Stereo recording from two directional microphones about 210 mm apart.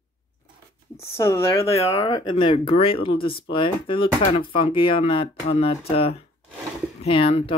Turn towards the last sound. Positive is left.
turn(degrees=25)  # may be behind; listen again after turning